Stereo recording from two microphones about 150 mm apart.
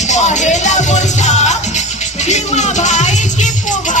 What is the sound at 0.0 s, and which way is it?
Music, 50° left (ahead or behind).